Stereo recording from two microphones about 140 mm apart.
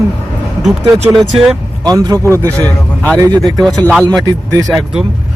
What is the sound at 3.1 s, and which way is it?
Speech, 25° right (ahead or behind).